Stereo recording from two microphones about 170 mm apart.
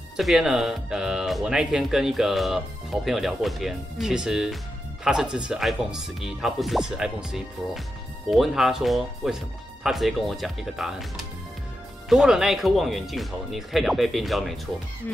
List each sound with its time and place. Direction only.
0.2 s speech: centre (ahead or behind)